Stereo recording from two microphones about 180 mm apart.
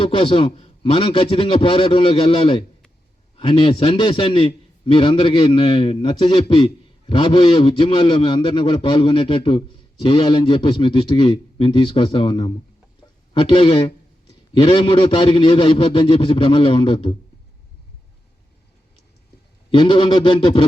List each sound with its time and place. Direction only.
0.0 s a man's voice: 30° left (ahead or behind)
19.7 s a man's voice: 25° left (ahead or behind)